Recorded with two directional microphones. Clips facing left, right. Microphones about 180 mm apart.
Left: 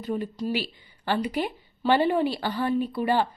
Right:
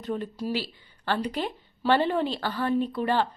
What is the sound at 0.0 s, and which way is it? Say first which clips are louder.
A woman's voice: left 2 dB; 5° left (ahead or behind).